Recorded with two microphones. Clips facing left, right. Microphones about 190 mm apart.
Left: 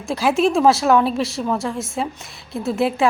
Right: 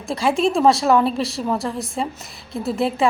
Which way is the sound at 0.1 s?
Centre (ahead or behind).